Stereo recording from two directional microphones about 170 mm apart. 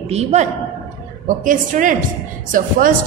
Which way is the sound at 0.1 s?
40° right (ahead or behind).